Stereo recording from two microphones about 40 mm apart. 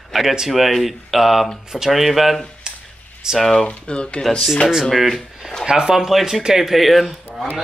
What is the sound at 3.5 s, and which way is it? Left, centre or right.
Speech, left.